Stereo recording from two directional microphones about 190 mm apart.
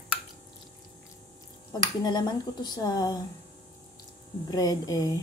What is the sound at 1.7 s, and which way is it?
Speech, 20° left (ahead or behind).